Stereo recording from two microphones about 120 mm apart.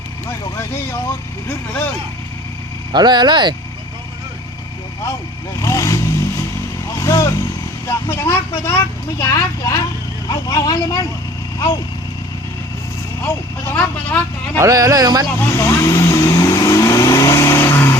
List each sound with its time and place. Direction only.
2.9 s speech: 40° right (ahead or behind)
5.5 s vehicle: 25° left (ahead or behind)
7.0 s speech: 25° left (ahead or behind)
13.2 s speech: 15° left (ahead or behind)
14.6 s speech: 30° right (ahead or behind)
15.3 s vehicle: 20° left (ahead or behind)